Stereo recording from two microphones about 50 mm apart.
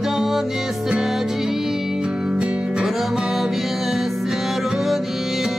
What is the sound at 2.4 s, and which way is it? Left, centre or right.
Music, right.